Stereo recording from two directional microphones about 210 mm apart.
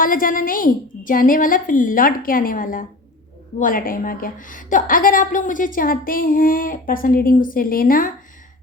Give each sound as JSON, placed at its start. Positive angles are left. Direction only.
{"t": 0.0, "sound": "a woman's voice", "side_deg": 40}